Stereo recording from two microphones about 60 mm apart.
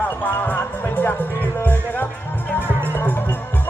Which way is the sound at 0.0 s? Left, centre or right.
Left.